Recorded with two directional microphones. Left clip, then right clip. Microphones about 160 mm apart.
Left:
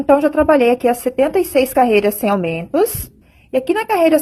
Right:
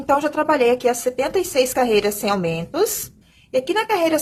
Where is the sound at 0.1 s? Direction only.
35° left (ahead or behind).